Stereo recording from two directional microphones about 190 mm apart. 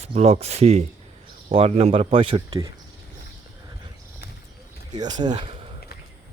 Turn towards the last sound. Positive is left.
turn(degrees=-30)  # may be behind; listen again after turning